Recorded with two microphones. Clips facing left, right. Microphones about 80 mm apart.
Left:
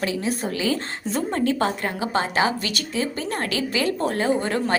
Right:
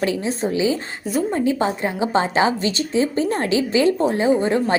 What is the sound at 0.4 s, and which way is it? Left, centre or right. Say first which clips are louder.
A woman's voice: right 4 dB; centre.